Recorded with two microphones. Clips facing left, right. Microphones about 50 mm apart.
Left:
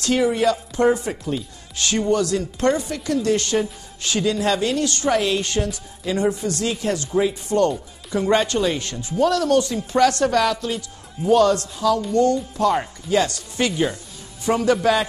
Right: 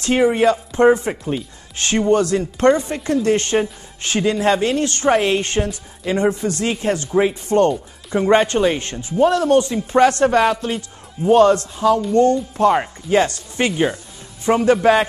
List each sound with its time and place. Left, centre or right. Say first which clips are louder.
0.0 s speech: right 4 dB; right